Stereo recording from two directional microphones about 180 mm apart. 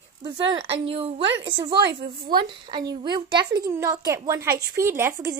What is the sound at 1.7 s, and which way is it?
Speech, 65° right (ahead or behind).